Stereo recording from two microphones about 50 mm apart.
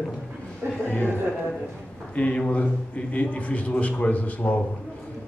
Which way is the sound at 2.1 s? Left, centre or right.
Left.